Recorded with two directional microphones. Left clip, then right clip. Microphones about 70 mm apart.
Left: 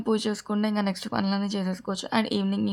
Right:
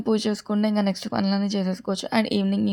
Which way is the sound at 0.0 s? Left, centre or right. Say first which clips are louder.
Right 2 dB; right.